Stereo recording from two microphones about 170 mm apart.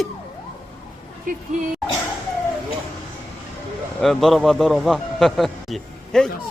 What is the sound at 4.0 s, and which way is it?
A man's voice, centre (ahead or behind).